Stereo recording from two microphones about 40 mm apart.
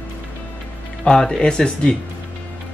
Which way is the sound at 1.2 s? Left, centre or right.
Centre.